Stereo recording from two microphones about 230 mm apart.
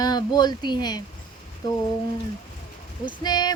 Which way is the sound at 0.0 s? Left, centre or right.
Centre.